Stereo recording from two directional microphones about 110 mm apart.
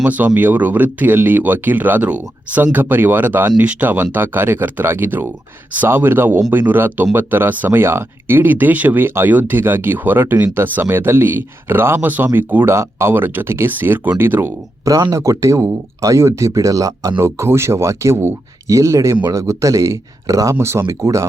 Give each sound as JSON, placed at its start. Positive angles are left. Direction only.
{"t": 0.0, "sound": "speech", "side_deg": -15}
{"t": 14.8, "sound": "speech", "side_deg": -35}